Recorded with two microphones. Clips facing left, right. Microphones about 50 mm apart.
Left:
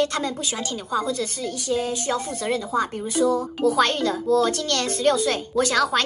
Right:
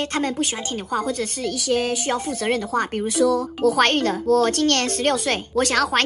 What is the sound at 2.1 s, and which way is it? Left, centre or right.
Speech, right.